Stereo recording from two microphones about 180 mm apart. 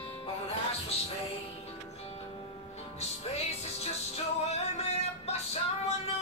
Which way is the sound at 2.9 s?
35° left (ahead or behind).